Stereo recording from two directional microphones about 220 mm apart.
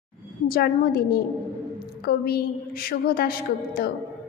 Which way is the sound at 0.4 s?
40° left (ahead or behind).